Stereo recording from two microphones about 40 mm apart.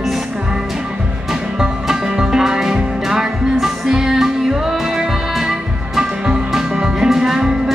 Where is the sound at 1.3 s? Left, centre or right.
Centre.